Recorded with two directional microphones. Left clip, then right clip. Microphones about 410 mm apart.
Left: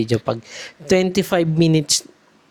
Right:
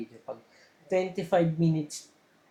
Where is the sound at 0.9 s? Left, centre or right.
Left.